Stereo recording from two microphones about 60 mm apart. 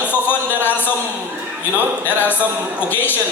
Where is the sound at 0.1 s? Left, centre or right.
Left.